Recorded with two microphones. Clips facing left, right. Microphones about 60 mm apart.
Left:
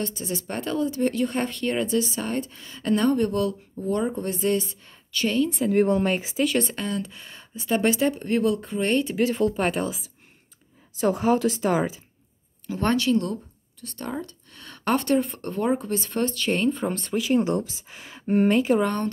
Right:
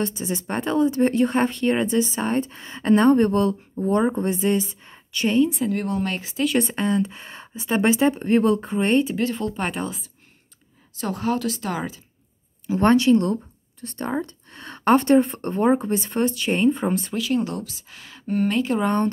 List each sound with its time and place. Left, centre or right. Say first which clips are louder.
0.0 s speech: right 4 dB; right
5.5 s speech: even; centre
5.8 s speech: left 5 dB; left
6.0 s speech: left 3 dB; centre
6.4 s speech: right 3 dB; centre
6.7 s speech: right 7 dB; right
9.1 s speech: left 2 dB; centre
11.0 s speech: left 3 dB; centre
12.7 s speech: right 6 dB; right; by 17.1 s centre
17.2 s speech: left 6 dB; centre
18.5 s speech: left 3 dB; centre